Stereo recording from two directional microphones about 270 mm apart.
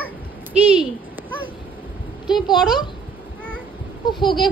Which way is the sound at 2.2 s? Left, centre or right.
Centre.